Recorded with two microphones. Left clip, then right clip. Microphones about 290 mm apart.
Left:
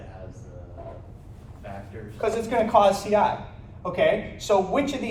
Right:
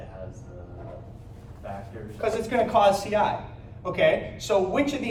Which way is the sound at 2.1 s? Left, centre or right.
Centre.